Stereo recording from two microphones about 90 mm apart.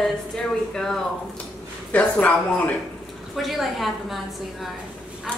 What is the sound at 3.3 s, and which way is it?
Speech, centre (ahead or behind).